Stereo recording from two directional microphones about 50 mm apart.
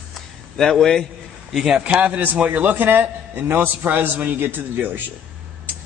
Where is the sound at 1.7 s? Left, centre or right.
Right.